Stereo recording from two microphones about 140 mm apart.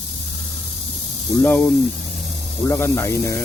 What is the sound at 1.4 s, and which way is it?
Speech, 15° left (ahead or behind).